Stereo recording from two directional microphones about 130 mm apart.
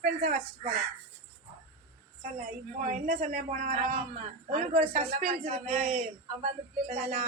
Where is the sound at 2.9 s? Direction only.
85° right; by 5.5 s 70° right (ahead or behind).